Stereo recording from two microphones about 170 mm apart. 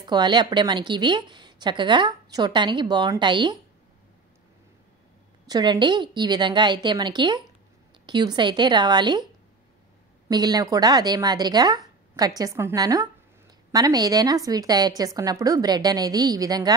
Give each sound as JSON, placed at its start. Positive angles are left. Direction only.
{"t": 0.0, "sound": "a woman's voice", "side_deg": -25}
{"t": 5.5, "sound": "a woman's voice", "side_deg": -25}
{"t": 10.2, "sound": "a woman's voice", "side_deg": -25}